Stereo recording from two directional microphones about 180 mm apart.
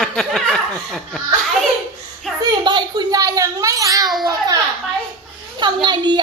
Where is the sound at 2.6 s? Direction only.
25° right (ahead or behind).